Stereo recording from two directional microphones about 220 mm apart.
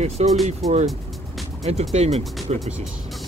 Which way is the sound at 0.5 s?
30° right (ahead or behind).